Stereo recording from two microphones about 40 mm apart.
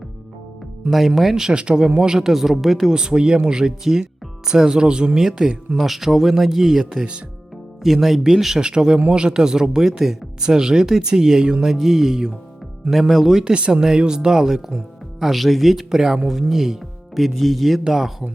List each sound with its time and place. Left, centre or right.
0.9 s speech: centre
1.5 s speech: right; by 2.9 s centre
2.9 s speech: centre
8.0 s speech: centre
8.6 s speech: right
11.6 s speech: centre
13.4 s speech: right
15.2 s speech: centre
17.8 s speech: centre